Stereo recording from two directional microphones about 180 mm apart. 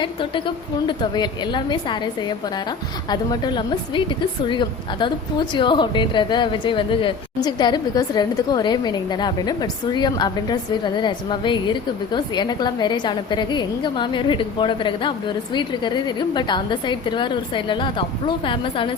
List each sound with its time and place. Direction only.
0.0 s a woman's voice: 25° left (ahead or behind)
3.1 s a woman's voice: 25° left (ahead or behind)